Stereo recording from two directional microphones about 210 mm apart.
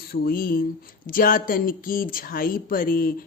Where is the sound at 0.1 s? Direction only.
45° left (ahead or behind).